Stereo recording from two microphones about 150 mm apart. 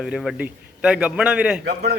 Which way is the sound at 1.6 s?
90° right.